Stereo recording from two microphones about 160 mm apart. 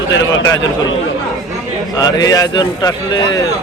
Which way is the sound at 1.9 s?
25° left (ahead or behind).